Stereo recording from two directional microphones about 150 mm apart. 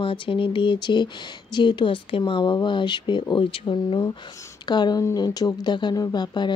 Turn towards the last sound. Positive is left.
turn(degrees=30)  # may be behind; listen again after turning